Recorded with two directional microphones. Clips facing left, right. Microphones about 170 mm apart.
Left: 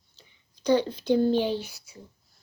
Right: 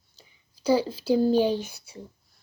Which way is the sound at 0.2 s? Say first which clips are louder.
Right 2 dB; 5° right (ahead or behind).